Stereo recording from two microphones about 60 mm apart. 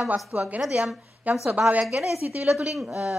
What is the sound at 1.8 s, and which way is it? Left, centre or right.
A woman's voice, centre.